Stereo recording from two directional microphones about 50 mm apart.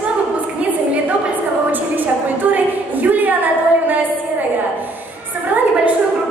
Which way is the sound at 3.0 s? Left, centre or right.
Right.